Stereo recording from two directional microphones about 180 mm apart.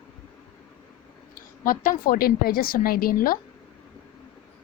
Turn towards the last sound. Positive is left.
turn(degrees=55)  # may be behind; listen again after turning